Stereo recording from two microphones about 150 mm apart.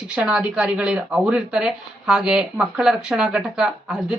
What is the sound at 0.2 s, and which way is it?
Speech, 5° right (ahead or behind).